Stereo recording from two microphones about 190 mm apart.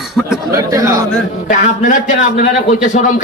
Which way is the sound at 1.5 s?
40° left (ahead or behind).